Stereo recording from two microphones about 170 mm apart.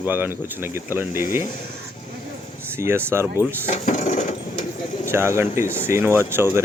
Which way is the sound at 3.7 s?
45° left (ahead or behind).